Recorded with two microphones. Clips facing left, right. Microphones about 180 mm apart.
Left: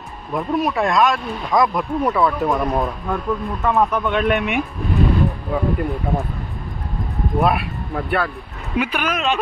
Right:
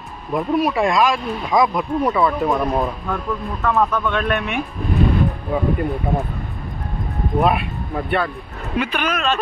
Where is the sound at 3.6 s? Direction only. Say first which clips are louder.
Even; 15° left (ahead or behind).